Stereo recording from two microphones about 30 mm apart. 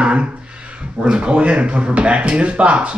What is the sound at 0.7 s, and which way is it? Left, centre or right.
Speech, right.